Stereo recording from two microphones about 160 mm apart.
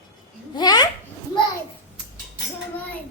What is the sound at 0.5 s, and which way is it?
Babbling, 25° left (ahead or behind).